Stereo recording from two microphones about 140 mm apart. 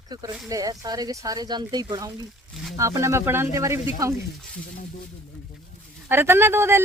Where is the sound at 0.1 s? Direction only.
30° right (ahead or behind).